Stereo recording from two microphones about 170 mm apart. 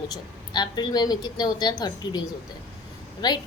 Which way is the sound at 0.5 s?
25° left (ahead or behind).